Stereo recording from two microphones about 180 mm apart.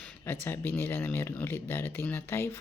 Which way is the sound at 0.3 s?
10° left (ahead or behind).